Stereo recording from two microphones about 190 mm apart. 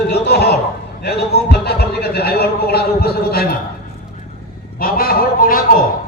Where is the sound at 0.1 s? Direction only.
60° left (ahead or behind).